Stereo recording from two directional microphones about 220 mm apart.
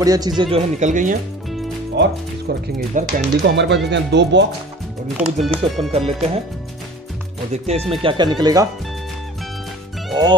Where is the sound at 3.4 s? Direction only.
55° right (ahead or behind).